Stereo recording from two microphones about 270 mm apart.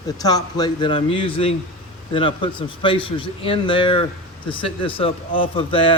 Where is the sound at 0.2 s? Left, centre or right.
Centre.